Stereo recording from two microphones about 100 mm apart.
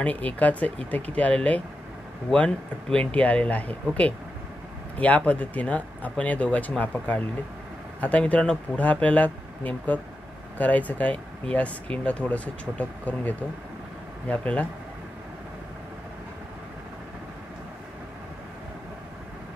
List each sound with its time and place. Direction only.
0.0 s speech: 15° left (ahead or behind)
4.9 s speech: 15° left (ahead or behind)